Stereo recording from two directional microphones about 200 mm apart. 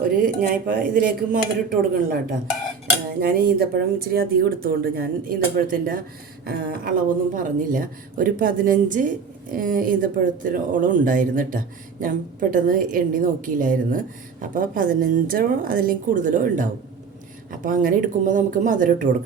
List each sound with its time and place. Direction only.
0.0 s a sound: 45° right (ahead or behind)
0.9 s speech: 45° right (ahead or behind)
3.2 s speech: 50° right (ahead or behind)